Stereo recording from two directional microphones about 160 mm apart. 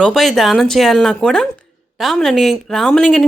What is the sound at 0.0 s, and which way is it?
Speech, centre (ahead or behind).